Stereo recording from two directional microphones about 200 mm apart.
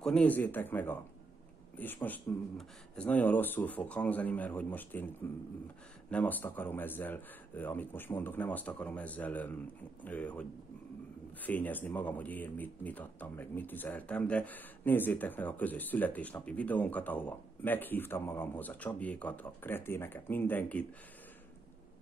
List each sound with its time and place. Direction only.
0.0 s speech: 5° left (ahead or behind)
2.0 s speech: 5° left (ahead or behind)
11.4 s speech: 10° left (ahead or behind)